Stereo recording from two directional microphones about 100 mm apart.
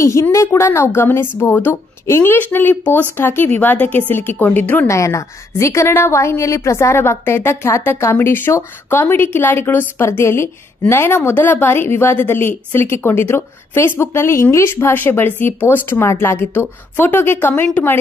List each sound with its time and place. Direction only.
0.0 s a woman's voice: 30° left (ahead or behind)
4.8 s a woman's voice: 30° left (ahead or behind); by 17.9 s 15° left (ahead or behind)